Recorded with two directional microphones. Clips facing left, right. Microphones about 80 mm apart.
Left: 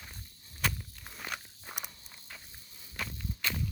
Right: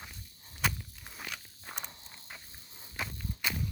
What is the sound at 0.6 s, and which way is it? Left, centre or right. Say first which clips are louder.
Walk: right 1 dB; centre.